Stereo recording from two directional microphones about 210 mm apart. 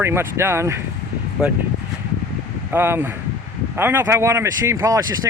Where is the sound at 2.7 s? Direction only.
10° right (ahead or behind).